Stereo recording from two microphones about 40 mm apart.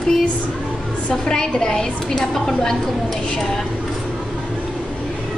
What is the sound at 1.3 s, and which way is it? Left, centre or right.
A woman's voice, centre.